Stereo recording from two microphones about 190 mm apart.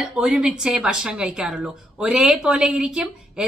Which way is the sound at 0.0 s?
5° right (ahead or behind).